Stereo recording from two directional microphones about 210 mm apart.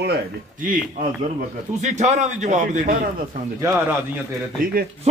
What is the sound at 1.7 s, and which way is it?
A man's voice, 35° right (ahead or behind).